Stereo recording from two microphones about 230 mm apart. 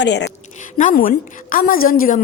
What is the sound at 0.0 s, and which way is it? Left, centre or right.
Speech, left.